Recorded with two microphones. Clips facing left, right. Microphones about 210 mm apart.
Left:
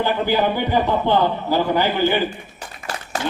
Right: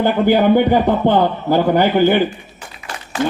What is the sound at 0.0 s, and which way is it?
A man's voice, 50° right (ahead or behind).